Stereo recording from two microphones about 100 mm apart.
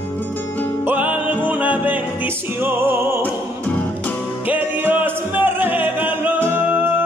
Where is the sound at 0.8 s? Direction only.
15° right (ahead or behind).